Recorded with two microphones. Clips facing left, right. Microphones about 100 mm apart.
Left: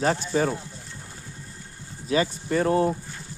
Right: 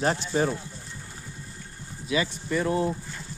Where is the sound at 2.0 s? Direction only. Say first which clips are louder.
Left 3 dB; 40° left (ahead or behind).